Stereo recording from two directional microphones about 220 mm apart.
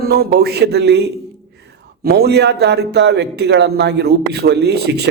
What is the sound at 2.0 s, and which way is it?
Speech, 45° right (ahead or behind).